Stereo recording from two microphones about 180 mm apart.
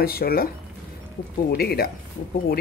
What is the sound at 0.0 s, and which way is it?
Speech, 55° left (ahead or behind).